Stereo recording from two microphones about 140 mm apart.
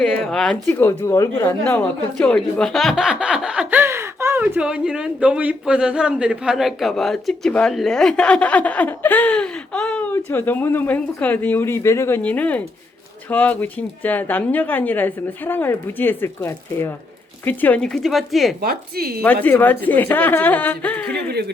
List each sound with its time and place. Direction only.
0.0 s speech: 5° left (ahead or behind)
0.7 s speech: 15° left (ahead or behind)
1.6 s a woman's voice: 10° left (ahead or behind)
18.6 s speech: 90° right
19.2 s a woman's voice: 10° left (ahead or behind)